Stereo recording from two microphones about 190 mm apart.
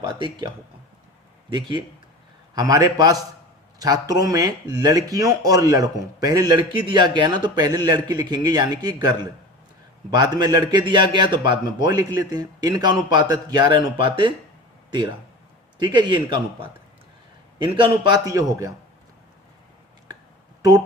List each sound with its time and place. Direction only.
0.1 s speech: 25° right (ahead or behind)
14.8 s a sound: 25° right (ahead or behind)
15.8 s speech: 25° right (ahead or behind)
17.7 s speech: 25° right (ahead or behind)
20.6 s speech: 20° right (ahead or behind)